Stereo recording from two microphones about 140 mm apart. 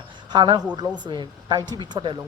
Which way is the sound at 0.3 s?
30° right (ahead or behind).